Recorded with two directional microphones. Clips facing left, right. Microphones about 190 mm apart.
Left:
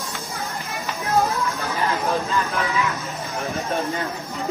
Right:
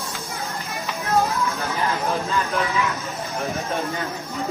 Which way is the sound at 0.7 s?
Centre (ahead or behind).